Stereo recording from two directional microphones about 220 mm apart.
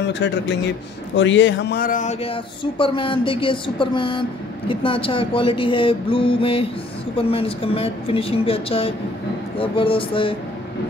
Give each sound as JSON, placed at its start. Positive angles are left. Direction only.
{"t": 0.0, "sound": "speech", "side_deg": 50}